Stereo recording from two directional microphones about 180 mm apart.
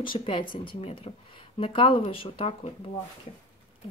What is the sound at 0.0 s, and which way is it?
Speech, 30° left (ahead or behind).